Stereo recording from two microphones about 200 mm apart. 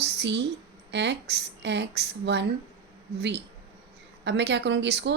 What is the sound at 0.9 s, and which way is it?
Speech, 60° right (ahead or behind).